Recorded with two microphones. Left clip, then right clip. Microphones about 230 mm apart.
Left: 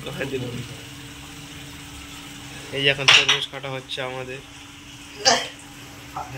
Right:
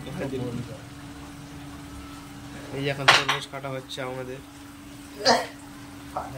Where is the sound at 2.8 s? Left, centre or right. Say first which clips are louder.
Left 4 dB; centre.